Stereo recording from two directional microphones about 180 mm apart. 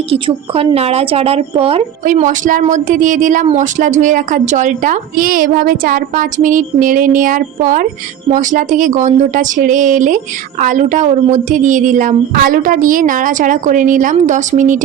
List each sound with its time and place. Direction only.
0.1 s speech: 30° right (ahead or behind)
2.0 s speech: 45° right (ahead or behind)